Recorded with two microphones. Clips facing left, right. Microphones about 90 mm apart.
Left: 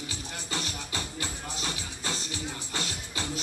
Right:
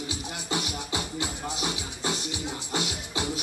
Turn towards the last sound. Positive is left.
turn(degrees=-15)  # may be behind; listen again after turning